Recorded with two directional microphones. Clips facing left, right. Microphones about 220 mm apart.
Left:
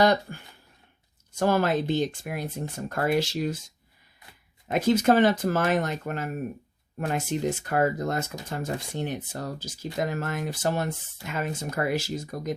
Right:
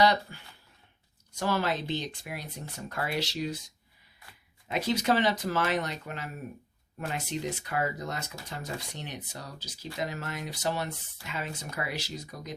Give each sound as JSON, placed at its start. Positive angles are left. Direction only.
{"t": 0.0, "sound": "speech", "side_deg": 50}
{"t": 4.7, "sound": "speech", "side_deg": 50}